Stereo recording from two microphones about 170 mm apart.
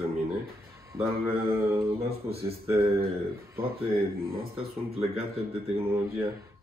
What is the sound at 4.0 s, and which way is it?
Speech, 65° right (ahead or behind).